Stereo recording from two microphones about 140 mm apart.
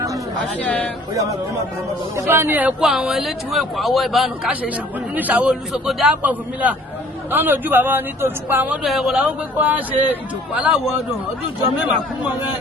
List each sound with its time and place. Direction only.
0.6 s a man's voice: 10° left (ahead or behind)
1.1 s speech: 25° right (ahead or behind); by 4.5 s centre (ahead or behind)
5.1 s speech: 10° right (ahead or behind)